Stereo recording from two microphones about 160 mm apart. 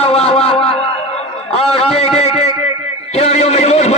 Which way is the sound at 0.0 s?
40° left (ahead or behind).